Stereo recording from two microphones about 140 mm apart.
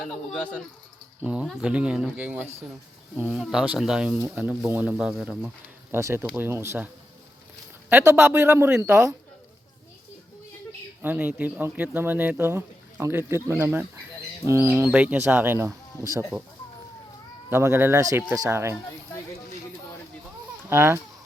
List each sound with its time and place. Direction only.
0.0 s a man's voice: 5° left (ahead or behind)
1.2 s speech: 10° right (ahead or behind)
5.9 s speech: 20° right (ahead or behind)
11.0 s speech: 15° right (ahead or behind)
17.5 s speech: 15° right (ahead or behind)
20.7 s speech: 15° right (ahead or behind)